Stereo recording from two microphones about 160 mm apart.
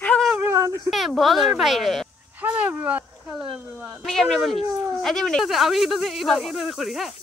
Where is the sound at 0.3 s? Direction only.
15° right (ahead or behind).